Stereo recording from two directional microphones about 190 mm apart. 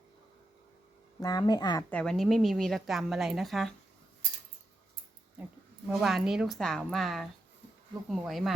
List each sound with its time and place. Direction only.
1.2 s speech: 20° left (ahead or behind)
1.9 s a woman's voice: 5° left (ahead or behind)
5.9 s a woman's voice: centre (ahead or behind)